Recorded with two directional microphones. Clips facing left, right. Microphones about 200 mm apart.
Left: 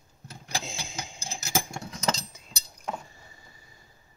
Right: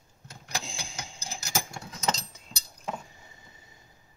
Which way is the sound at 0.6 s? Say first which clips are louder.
Left 3 dB; 20° left (ahead or behind).